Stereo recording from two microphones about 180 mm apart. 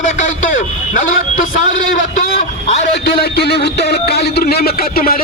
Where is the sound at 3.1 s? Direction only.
65° left (ahead or behind).